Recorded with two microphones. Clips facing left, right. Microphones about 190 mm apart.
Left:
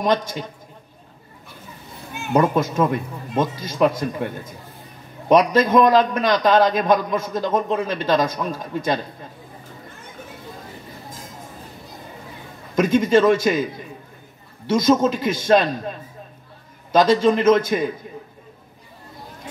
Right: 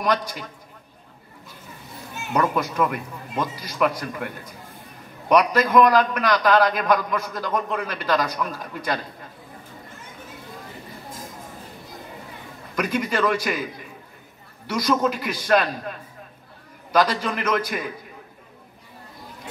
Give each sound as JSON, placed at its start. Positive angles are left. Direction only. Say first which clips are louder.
{"t": 0.0, "sound": "a man's voice", "louder": "left 3 dB", "side_deg": 25}
{"t": 2.3, "sound": "a man's voice", "louder": "left 4 dB", "side_deg": 25}
{"t": 12.7, "sound": "a man's voice", "louder": "left 8 dB", "side_deg": 25}
{"t": 14.7, "sound": "a man's voice", "louder": "left 5 dB", "side_deg": 25}